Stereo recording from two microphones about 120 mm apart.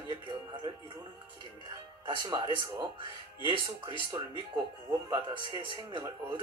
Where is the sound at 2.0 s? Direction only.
40° right (ahead or behind).